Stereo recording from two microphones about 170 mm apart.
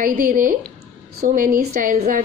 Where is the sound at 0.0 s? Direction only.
55° right (ahead or behind).